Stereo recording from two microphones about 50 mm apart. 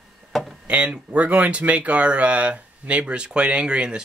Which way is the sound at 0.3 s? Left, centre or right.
Centre.